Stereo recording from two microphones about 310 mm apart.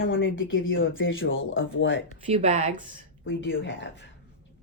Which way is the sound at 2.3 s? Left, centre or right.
Right.